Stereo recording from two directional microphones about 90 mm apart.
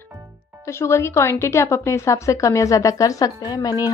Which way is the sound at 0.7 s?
30° left (ahead or behind).